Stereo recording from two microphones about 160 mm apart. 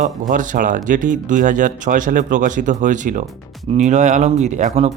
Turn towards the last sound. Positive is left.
turn(degrees=-45)  # may be behind; listen again after turning